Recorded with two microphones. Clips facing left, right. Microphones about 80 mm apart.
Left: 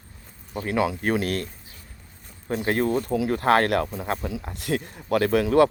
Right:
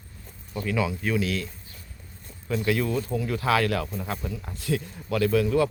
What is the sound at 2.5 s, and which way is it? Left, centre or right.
Speech, left.